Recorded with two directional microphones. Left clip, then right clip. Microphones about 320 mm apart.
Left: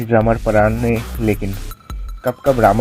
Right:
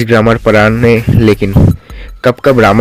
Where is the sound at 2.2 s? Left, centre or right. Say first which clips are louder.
Right 6 dB; right.